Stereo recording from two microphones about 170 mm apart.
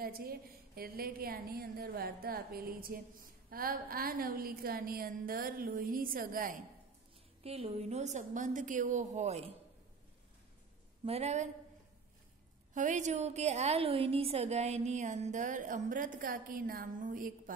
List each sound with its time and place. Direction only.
0.0 s a woman's voice: 60° right (ahead or behind)
7.4 s a woman's voice: 35° right (ahead or behind)
11.1 s a woman's voice: 40° right (ahead or behind)
12.7 s a woman's voice: 45° right (ahead or behind)